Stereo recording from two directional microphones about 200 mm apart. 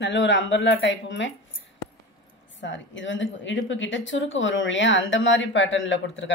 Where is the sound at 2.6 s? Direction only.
65° left (ahead or behind).